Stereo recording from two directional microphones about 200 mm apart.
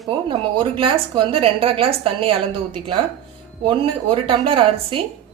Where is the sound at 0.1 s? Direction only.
25° right (ahead or behind).